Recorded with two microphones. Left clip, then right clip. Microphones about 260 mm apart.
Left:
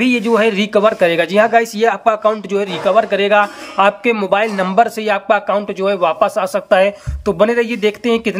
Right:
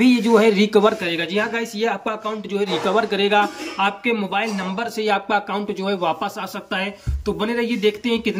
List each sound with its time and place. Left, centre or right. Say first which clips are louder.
0.0 s speech: left 2 dB; centre